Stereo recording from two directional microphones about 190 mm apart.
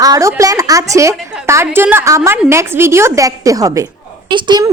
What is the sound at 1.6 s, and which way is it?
A woman's voice, 10° right (ahead or behind).